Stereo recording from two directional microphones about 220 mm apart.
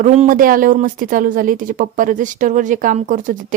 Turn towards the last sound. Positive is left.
turn(degrees=-35)  # may be behind; listen again after turning